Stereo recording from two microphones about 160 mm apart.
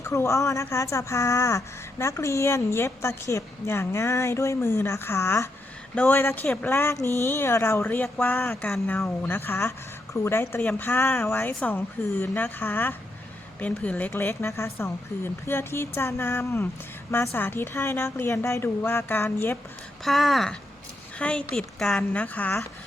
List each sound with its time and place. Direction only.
0.0 s speech: 15° left (ahead or behind)
20.1 s speech: centre (ahead or behind)